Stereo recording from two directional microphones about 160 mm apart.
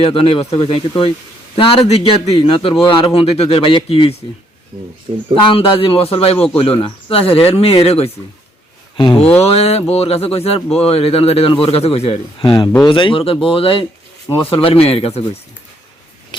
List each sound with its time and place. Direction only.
0.0 s a man's voice: 35° left (ahead or behind)
5.3 s a man's voice: 35° left (ahead or behind)
16.3 s a sound: 30° left (ahead or behind)